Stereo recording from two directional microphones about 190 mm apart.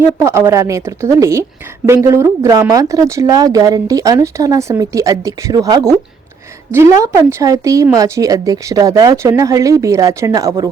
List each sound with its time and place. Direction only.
0.2 s a woman's voice: 15° right (ahead or behind)